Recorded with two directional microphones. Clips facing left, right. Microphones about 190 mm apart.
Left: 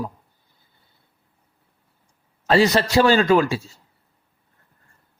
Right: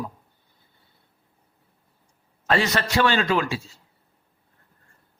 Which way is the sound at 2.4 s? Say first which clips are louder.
Left 6 dB; 35° left (ahead or behind).